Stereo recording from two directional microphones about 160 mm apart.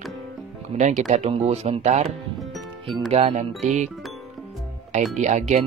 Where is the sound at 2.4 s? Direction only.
Centre (ahead or behind).